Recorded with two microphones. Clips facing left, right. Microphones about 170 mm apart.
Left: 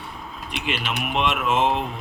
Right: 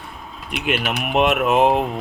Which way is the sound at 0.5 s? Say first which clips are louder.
Right 5 dB; 55° right (ahead or behind).